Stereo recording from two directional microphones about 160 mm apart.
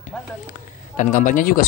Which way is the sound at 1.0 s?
55° left (ahead or behind).